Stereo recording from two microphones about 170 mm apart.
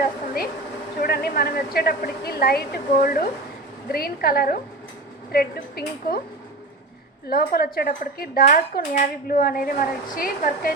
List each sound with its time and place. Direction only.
0.9 s speech: 65° left (ahead or behind)
7.3 s speech: 60° left (ahead or behind)